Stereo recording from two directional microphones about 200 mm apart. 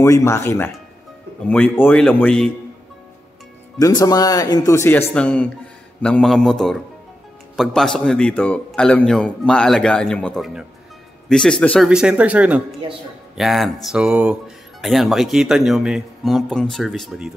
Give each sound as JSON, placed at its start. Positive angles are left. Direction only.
{"t": 0.0, "sound": "speech", "side_deg": 15}
{"t": 3.7, "sound": "speech", "side_deg": 20}